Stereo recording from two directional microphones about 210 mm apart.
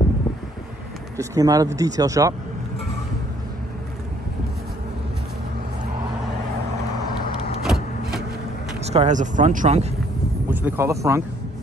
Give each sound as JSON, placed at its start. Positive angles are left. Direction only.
{"t": 1.1, "sound": "speech", "side_deg": -15}
{"t": 7.6, "sound": "vehicle", "side_deg": 0}
{"t": 8.9, "sound": "speech", "side_deg": -35}
{"t": 10.5, "sound": "speech", "side_deg": -10}